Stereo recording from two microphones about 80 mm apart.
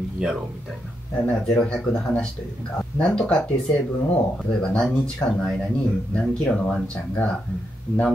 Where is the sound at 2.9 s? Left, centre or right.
Centre.